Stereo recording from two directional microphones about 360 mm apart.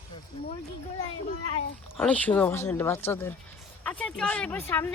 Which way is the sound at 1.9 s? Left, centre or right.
Centre.